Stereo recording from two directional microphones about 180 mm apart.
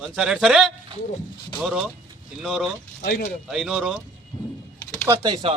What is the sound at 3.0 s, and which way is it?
Speech, 70° left (ahead or behind).